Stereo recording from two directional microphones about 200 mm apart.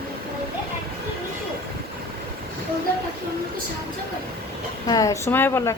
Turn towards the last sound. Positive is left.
turn(degrees=10)  # may be behind; listen again after turning